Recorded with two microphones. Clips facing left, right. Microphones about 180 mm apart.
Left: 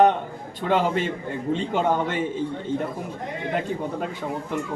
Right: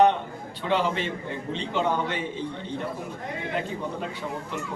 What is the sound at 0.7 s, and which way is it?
A man's voice, 45° left (ahead or behind).